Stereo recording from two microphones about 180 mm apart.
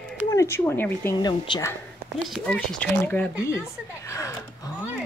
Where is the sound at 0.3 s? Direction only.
15° left (ahead or behind).